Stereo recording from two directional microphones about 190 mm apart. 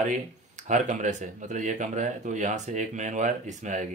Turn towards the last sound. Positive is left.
turn(degrees=-40)  # may be behind; listen again after turning